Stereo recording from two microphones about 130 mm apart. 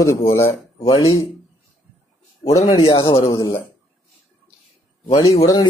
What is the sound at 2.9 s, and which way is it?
Speech, 35° left (ahead or behind).